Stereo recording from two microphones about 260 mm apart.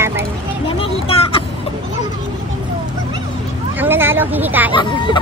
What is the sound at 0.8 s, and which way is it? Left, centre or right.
Vehicle, left.